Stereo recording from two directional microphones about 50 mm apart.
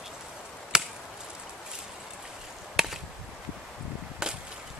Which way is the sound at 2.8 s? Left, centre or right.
Centre.